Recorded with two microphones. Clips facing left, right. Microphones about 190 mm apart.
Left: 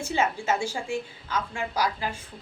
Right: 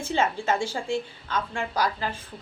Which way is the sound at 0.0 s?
10° left (ahead or behind).